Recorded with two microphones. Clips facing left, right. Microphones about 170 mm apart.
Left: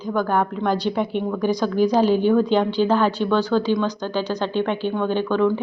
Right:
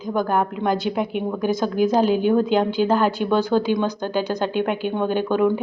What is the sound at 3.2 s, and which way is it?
A woman's voice, 15° right (ahead or behind).